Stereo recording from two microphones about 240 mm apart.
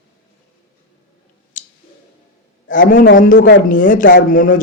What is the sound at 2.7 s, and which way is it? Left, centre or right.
Speech, left.